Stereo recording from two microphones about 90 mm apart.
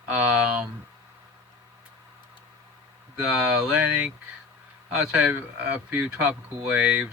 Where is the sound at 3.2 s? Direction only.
10° right (ahead or behind).